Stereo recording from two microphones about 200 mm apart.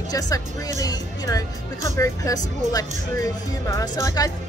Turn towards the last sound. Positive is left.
turn(degrees=15)  # may be behind; listen again after turning